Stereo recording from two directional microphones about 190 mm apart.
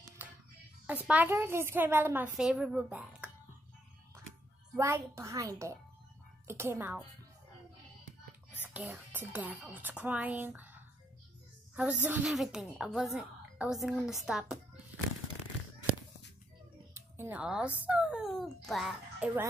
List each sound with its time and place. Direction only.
0.2 s a sound: 10° right (ahead or behind)
0.8 s speech: 10° right (ahead or behind)
4.7 s speech: 15° right (ahead or behind)
8.6 s a woman's voice: 5° right (ahead or behind)
16.9 s speech: 10° right (ahead or behind)